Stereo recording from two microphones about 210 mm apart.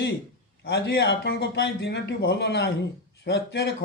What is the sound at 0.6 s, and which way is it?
A man's voice, 50° left (ahead or behind).